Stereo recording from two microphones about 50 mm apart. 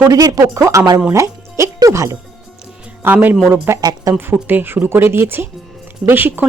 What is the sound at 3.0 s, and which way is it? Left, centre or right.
A man's voice, right.